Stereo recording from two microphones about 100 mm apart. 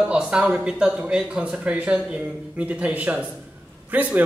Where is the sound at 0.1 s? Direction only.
10° right (ahead or behind).